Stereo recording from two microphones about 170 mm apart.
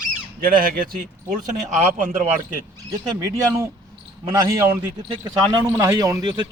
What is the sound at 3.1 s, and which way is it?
Speech, 15° right (ahead or behind).